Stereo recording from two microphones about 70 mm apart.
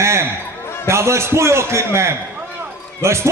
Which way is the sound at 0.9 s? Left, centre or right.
Right.